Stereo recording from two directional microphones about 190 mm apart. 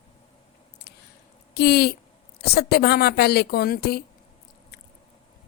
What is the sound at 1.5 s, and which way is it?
A woman's voice, 55° left (ahead or behind).